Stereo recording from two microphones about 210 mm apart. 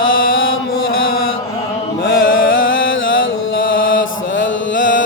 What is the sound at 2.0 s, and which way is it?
Chant, 65° left (ahead or behind).